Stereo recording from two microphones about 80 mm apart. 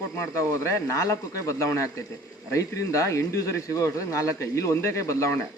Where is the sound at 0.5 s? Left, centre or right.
Left.